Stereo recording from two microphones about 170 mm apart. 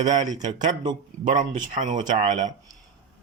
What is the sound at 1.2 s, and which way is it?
Speech, 45° right (ahead or behind).